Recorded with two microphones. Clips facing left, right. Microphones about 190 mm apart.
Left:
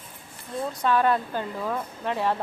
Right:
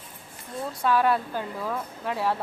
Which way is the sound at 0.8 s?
5° right (ahead or behind).